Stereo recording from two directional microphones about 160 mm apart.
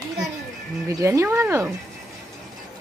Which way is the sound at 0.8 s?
20° right (ahead or behind).